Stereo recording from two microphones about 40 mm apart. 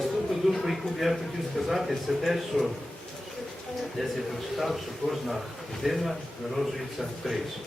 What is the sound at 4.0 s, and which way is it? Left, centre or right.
A man's voice, centre.